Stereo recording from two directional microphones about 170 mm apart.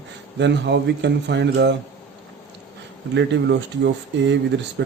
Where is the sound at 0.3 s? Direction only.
90° right.